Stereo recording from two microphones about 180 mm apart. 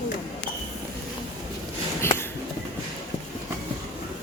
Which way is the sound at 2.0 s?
10° left (ahead or behind).